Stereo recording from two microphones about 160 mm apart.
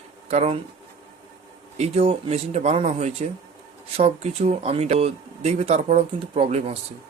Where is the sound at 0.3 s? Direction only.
40° right (ahead or behind).